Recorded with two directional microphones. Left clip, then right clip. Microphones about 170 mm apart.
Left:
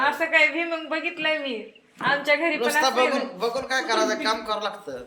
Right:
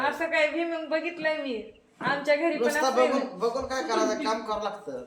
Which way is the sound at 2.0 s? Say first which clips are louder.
Left 3 dB; 5° left (ahead or behind).